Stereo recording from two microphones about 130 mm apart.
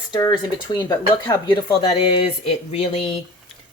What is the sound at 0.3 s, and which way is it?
Speech, 35° left (ahead or behind).